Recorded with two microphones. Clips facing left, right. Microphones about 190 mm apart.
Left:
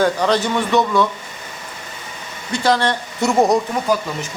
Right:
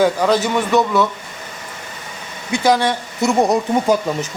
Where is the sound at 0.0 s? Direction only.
5° right (ahead or behind).